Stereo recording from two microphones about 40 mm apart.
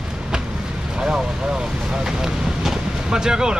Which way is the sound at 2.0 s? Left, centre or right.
Centre.